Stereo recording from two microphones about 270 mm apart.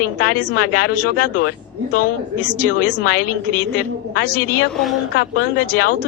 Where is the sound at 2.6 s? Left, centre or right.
Left.